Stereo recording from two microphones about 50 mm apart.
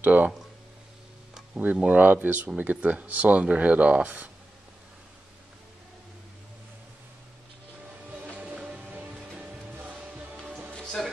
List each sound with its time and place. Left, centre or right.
0.0 s speech: right
1.5 s speech: right
8.2 s music: right
9.6 s music: right
10.7 s music: centre